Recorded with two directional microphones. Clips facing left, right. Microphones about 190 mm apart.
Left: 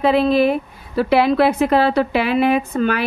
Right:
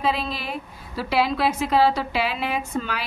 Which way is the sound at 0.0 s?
60° left (ahead or behind).